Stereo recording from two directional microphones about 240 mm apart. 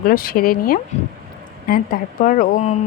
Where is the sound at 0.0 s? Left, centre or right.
Left.